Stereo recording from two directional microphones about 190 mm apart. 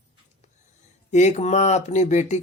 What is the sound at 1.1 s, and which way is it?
Speech, 40° left (ahead or behind).